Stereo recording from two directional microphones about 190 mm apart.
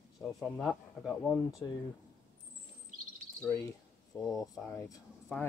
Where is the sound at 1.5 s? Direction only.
15° left (ahead or behind).